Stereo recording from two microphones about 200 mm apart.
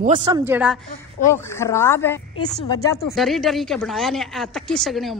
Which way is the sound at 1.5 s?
15° left (ahead or behind).